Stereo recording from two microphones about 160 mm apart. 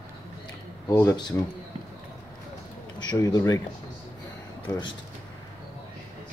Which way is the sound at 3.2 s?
25° left (ahead or behind).